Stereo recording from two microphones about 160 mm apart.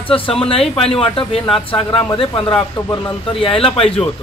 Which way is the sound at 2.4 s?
15° left (ahead or behind).